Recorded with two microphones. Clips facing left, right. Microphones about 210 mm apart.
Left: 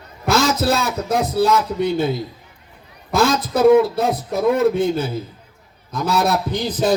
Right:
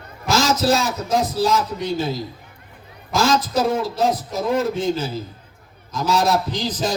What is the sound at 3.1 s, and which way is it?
Speech, 60° left (ahead or behind).